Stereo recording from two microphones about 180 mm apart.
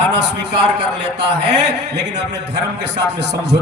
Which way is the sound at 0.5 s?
75° right (ahead or behind).